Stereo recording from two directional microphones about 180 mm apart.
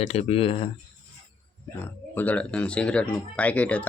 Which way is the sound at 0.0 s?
35° left (ahead or behind).